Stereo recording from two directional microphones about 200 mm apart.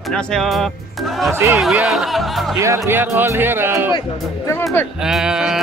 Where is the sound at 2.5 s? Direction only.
15° right (ahead or behind).